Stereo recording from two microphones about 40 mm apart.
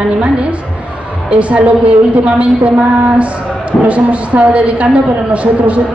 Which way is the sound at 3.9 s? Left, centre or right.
Right.